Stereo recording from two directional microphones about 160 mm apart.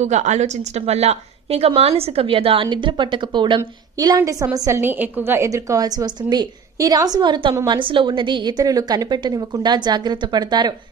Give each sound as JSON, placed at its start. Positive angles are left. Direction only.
{"t": 0.0, "sound": "a woman's voice", "side_deg": -45}